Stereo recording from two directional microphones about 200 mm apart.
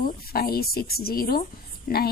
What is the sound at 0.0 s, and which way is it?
A woman's voice, 50° left (ahead or behind).